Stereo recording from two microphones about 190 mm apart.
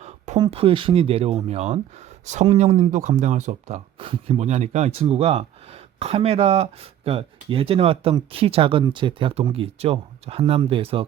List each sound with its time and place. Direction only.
0.3 s speech: 25° right (ahead or behind)